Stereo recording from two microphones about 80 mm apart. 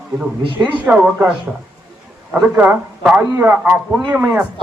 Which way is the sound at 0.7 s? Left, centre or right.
Centre.